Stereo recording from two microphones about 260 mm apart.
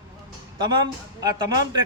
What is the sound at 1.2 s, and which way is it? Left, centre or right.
Speech, centre.